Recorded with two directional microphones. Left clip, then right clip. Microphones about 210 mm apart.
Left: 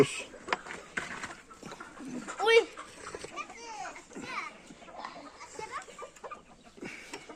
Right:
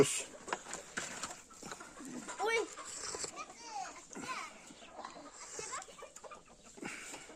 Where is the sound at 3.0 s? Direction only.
10° right (ahead or behind).